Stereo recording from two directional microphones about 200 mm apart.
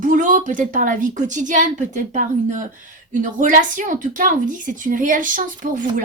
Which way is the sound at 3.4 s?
40° right (ahead or behind).